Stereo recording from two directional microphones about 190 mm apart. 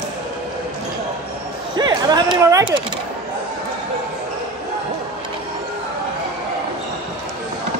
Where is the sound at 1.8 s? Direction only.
20° right (ahead or behind).